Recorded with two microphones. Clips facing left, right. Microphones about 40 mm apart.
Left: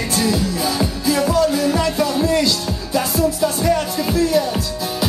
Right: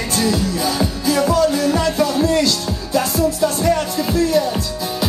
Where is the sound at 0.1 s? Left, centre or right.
Centre.